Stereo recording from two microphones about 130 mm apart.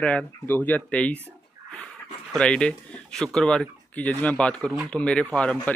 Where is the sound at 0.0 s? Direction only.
10° left (ahead or behind).